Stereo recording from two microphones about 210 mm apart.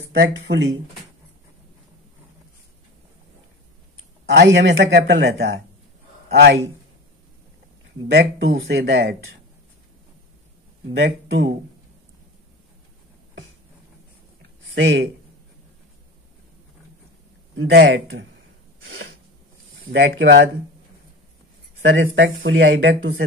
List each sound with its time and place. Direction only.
0.1 s speech: 60° right (ahead or behind)
4.4 s speech: 55° right (ahead or behind)
8.4 s speech: 70° right (ahead or behind)
8.7 s speech: 50° right (ahead or behind)
11.0 s speech: 60° right (ahead or behind)
14.7 s speech: 65° right (ahead or behind)
17.6 s speech: 65° right (ahead or behind)
19.9 s speech: 60° right (ahead or behind)
21.8 s speech: 65° right (ahead or behind)